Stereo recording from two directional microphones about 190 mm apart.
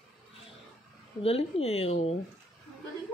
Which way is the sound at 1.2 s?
30° left (ahead or behind).